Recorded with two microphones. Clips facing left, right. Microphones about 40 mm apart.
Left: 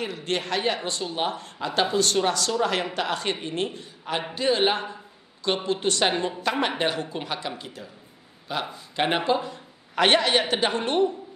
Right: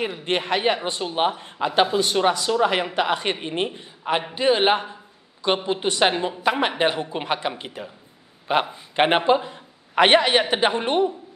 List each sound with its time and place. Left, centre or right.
0.0 s speech: right